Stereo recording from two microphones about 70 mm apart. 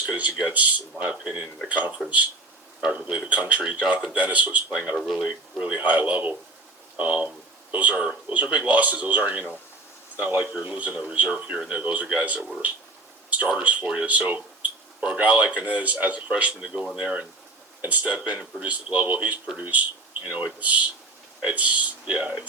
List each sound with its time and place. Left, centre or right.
0.0 s speech: centre
4.9 s speech: centre
5.3 s speech: centre